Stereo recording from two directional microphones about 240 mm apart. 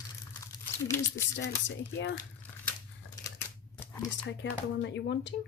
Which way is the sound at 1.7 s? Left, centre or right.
Left.